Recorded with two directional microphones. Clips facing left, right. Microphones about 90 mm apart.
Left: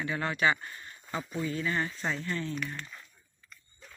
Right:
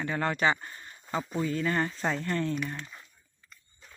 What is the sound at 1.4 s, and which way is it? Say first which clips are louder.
Speech: right 3 dB; 45° right (ahead or behind).